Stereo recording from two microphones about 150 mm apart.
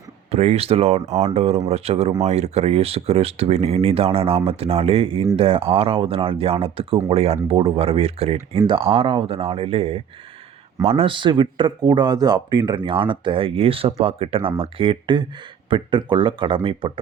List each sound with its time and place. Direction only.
0.3 s speech: 45° right (ahead or behind)